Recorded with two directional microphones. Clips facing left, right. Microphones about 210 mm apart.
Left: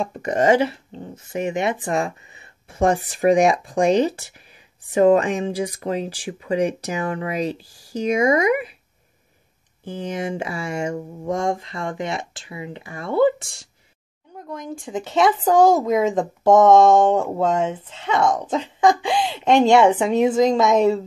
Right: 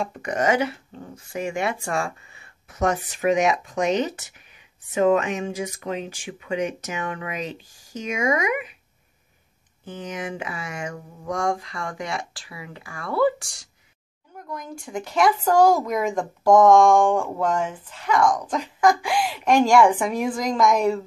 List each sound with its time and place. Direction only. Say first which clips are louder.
0.0 s speech: left 4 dB; 25° left (ahead or behind)
9.8 s speech: left 5 dB; 30° left (ahead or behind)